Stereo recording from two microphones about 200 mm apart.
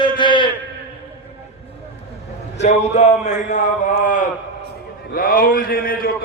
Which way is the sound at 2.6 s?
35° left (ahead or behind).